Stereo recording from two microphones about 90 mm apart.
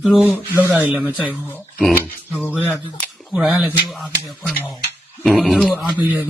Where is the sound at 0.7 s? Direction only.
15° right (ahead or behind).